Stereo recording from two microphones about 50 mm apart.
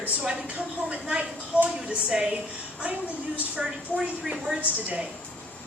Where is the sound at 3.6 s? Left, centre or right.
Centre.